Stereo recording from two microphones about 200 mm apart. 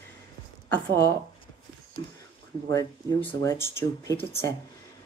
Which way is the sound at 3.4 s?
15° left (ahead or behind).